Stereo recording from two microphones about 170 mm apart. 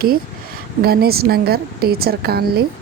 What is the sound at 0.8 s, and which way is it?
A woman's voice, 65° right (ahead or behind).